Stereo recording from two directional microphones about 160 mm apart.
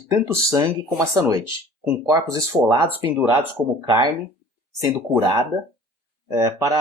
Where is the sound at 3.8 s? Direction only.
25° right (ahead or behind).